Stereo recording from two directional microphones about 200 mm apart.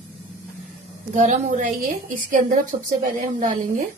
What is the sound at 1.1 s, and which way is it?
A woman's voice, 40° right (ahead or behind).